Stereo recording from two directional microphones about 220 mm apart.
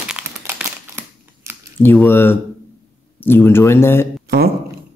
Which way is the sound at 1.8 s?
10° left (ahead or behind).